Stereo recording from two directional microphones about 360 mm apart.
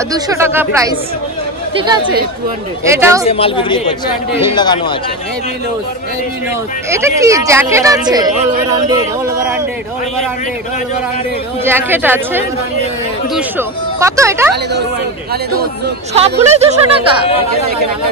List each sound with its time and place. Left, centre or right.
0.1 s speech: centre
3.3 s speech: centre
6.9 s speech: centre
11.6 s speech: centre
14.5 s a woman's voice: right